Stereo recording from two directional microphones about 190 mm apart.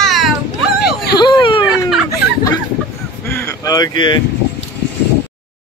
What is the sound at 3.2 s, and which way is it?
Boat, 15° left (ahead or behind).